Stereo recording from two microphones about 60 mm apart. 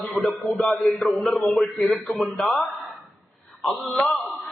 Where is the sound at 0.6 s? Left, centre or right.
Centre.